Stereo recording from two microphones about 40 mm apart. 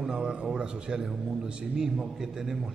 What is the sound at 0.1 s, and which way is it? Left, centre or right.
A man's voice, centre.